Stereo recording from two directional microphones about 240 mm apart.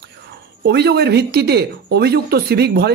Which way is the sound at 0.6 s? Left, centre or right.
Right.